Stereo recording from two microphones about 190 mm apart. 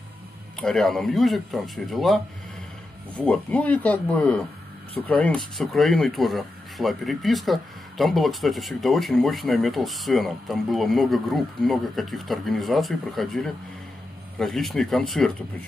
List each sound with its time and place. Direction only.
0.6 s speech: 5° left (ahead or behind)
3.2 s speech: 5° left (ahead or behind)